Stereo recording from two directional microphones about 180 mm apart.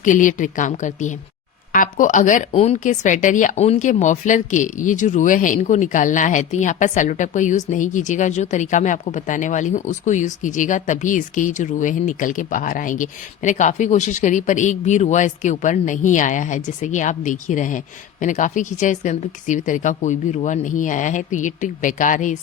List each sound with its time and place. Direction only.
0.0 s a woman's voice: 45° left (ahead or behind)